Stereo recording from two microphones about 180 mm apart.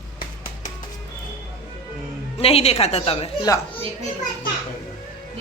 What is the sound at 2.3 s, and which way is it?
Speech, 35° left (ahead or behind).